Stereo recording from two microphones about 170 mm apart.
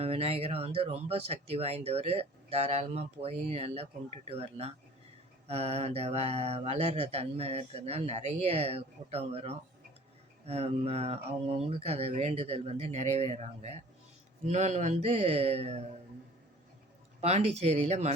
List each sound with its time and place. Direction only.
0.0 s speech: 35° right (ahead or behind)
17.2 s speech: 40° right (ahead or behind)